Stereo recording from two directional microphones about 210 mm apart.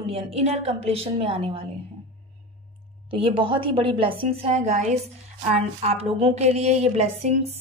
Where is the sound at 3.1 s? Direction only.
25° right (ahead or behind).